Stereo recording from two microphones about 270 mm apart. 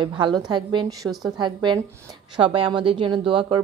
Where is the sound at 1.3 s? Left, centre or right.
Centre.